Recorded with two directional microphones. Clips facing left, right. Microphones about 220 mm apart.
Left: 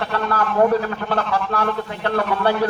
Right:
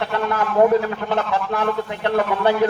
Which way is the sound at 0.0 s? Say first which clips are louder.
Even; 20° right (ahead or behind).